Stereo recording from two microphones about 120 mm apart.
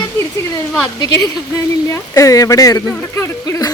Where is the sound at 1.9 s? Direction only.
25° left (ahead or behind).